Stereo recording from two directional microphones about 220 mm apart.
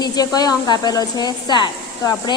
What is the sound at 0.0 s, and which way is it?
A woman's voice, 15° left (ahead or behind).